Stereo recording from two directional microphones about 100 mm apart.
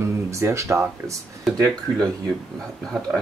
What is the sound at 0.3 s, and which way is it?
Speech, 30° right (ahead or behind).